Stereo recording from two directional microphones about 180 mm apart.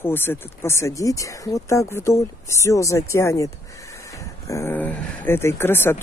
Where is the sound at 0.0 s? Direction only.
10° left (ahead or behind).